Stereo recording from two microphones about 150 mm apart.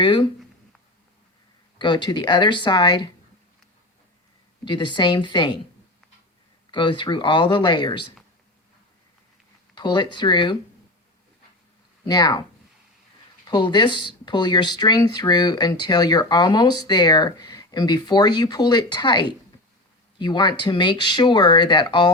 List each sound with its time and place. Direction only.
0.0 s speech: 30° left (ahead or behind)
1.8 s speech: 30° left (ahead or behind)
4.6 s speech: 30° left (ahead or behind)
6.7 s speech: 30° left (ahead or behind)
9.7 s speech: 30° left (ahead or behind)
12.0 s speech: 25° left (ahead or behind)